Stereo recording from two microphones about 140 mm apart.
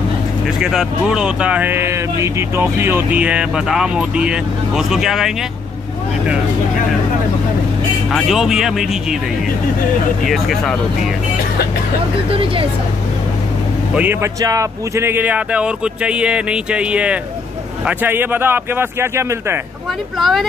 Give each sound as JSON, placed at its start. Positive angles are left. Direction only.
{"t": 0.6, "sound": "speech", "side_deg": -5}
{"t": 8.1, "sound": "speech", "side_deg": 0}
{"t": 10.2, "sound": "speech", "side_deg": 0}
{"t": 12.3, "sound": "speech", "side_deg": -40}
{"t": 13.9, "sound": "speech", "side_deg": -15}
{"t": 14.4, "sound": "speech", "side_deg": -25}
{"t": 20.2, "sound": "speech", "side_deg": 0}